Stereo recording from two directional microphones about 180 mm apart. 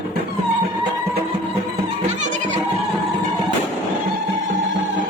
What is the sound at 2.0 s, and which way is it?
Music, 40° right (ahead or behind).